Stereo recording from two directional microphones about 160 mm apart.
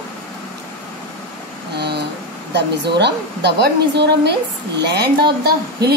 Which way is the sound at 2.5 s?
90° right.